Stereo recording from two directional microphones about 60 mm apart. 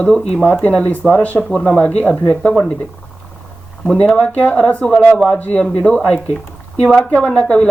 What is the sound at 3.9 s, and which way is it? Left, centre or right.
Speech, centre.